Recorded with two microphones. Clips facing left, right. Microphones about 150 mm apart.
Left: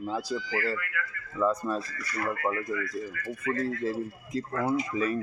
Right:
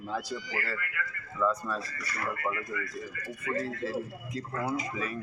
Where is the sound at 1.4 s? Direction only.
35° left (ahead or behind).